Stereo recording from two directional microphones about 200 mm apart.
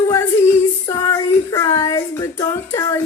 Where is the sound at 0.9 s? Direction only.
20° left (ahead or behind).